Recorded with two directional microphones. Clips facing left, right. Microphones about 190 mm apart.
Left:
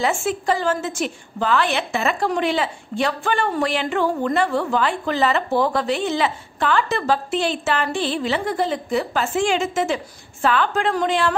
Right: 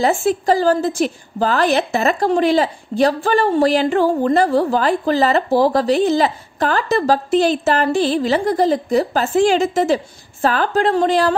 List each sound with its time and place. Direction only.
0.0 s a woman's voice: 35° right (ahead or behind)